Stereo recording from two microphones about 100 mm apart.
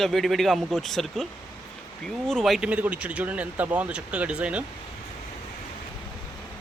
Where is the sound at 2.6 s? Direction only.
15° right (ahead or behind).